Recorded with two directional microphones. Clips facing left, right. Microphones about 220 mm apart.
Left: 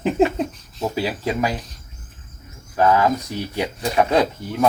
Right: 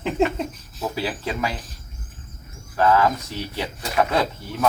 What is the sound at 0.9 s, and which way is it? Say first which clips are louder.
Speech: left 4 dB; 15° left (ahead or behind).